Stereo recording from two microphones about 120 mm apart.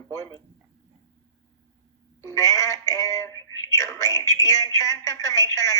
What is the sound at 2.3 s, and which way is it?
Speech, 25° left (ahead or behind).